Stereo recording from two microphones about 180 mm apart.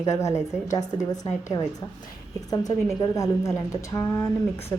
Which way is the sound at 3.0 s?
15° left (ahead or behind).